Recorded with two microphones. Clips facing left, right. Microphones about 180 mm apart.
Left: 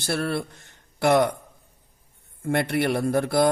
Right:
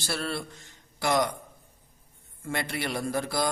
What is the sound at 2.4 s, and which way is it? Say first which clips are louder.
Speech: left 9 dB; 55° left (ahead or behind).